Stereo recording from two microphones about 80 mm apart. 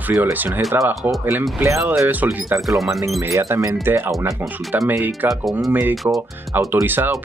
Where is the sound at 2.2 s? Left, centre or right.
Right.